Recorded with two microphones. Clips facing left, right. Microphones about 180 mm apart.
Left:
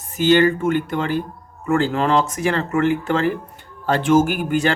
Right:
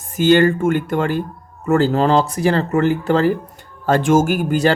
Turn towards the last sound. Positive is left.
turn(degrees=-35)  # may be behind; listen again after turning